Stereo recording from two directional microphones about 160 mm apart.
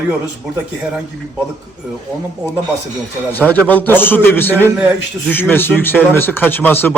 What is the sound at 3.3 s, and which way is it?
Speech, 10° left (ahead or behind).